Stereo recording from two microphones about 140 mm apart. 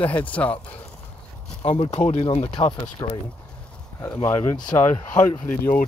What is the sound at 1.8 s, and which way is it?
Speech, 50° left (ahead or behind).